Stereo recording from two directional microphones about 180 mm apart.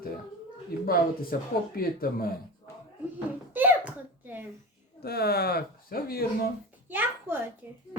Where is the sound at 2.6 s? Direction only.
25° left (ahead or behind).